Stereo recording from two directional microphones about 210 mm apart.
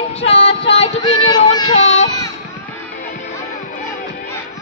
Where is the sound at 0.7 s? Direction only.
30° left (ahead or behind).